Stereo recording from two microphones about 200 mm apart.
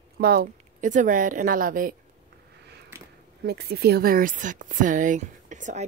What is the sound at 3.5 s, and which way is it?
Speech, 55° right (ahead or behind).